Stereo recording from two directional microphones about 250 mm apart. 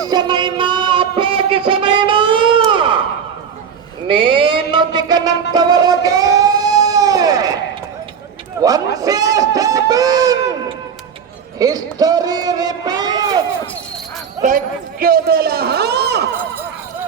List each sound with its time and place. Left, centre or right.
0.1 s music: centre
2.6 s crowd: centre
4.1 s music: centre
8.6 s a sound: centre
11.6 s speech: centre
14.4 s speech: right